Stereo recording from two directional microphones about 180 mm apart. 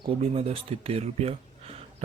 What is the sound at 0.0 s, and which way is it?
Speech, 35° right (ahead or behind).